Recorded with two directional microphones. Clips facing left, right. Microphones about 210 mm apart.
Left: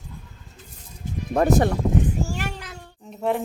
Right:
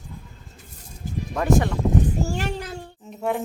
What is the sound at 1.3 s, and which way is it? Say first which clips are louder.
Speech: left 2 dB; 45° left (ahead or behind).